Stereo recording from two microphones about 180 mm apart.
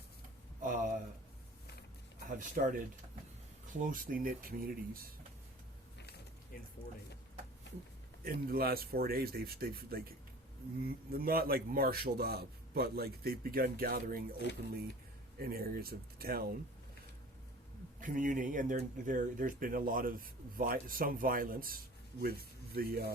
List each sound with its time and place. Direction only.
0.6 s a sound: 45° right (ahead or behind)
2.2 s speech: 45° right (ahead or behind)
3.8 s speech: 50° right (ahead or behind)
6.0 s mechanisms: 65° left (ahead or behind)
8.2 s a man's voice: 55° right (ahead or behind)
15.4 s a man's voice: 60° right (ahead or behind)
18.0 s a man's voice: 45° right (ahead or behind)